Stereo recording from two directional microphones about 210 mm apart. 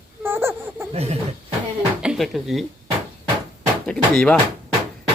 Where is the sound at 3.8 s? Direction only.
5° left (ahead or behind).